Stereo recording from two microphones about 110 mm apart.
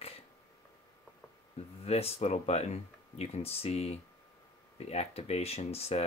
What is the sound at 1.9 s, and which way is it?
Speech, 65° left (ahead or behind).